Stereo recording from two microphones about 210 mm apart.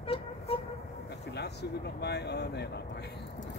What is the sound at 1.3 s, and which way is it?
Speech, 50° left (ahead or behind).